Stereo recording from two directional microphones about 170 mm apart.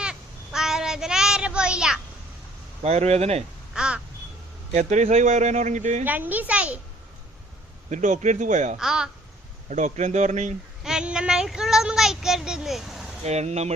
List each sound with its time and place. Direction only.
0.0 s child singing: 5° right (ahead or behind)
2.8 s speech: 40° right (ahead or behind)
3.8 s crow: 5° right (ahead or behind)
4.7 s speech: 45° right (ahead or behind)
6.1 s a woman's voice: 10° right (ahead or behind)
7.9 s speech: 45° right (ahead or behind)
8.8 s speech: 5° right (ahead or behind)
9.6 s speech: 45° right (ahead or behind)
10.8 s speech: 5° right (ahead or behind)
13.2 s speech: 40° right (ahead or behind)